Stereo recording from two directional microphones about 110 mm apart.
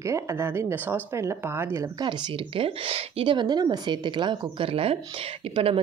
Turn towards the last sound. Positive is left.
turn(degrees=-60)  # may be behind; listen again after turning